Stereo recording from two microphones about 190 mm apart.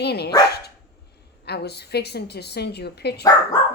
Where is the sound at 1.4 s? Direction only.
60° left (ahead or behind).